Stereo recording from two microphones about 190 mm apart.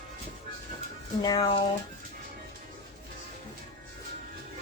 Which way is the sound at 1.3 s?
25° left (ahead or behind).